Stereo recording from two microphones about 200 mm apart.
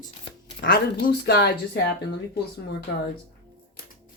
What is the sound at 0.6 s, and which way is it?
Speech, 50° left (ahead or behind).